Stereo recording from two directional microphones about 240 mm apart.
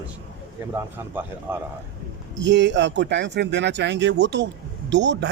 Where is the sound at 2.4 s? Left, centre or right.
Right.